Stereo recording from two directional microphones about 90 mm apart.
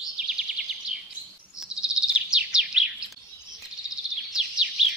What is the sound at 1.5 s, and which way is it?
Bird vocalization, 10° right (ahead or behind).